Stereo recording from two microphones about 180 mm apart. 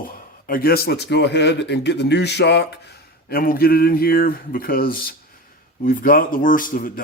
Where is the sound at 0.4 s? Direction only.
55° left (ahead or behind); by 2.7 s 70° left (ahead or behind).